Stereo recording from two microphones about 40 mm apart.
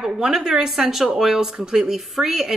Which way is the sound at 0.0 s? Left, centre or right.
Centre.